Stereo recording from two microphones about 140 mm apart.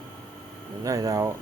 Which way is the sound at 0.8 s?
25° right (ahead or behind).